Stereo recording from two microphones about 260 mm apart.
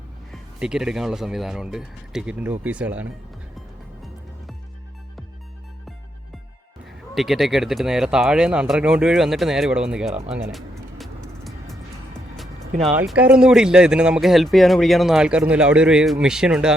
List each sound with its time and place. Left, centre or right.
0.3 s speech: centre
6.8 s speech: centre
10.5 s music: centre
12.9 s speech: centre